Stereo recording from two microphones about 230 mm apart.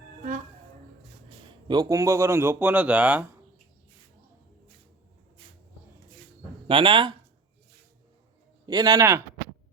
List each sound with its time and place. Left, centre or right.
1.6 s speech: centre
6.7 s speech: right
8.6 s speech: centre